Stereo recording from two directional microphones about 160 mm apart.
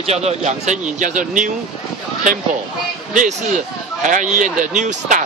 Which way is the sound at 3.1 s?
50° right (ahead or behind).